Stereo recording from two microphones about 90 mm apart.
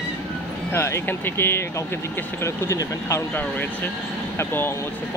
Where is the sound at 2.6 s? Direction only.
35° left (ahead or behind).